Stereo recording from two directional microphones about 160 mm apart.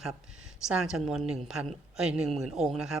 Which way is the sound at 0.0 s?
5° right (ahead or behind).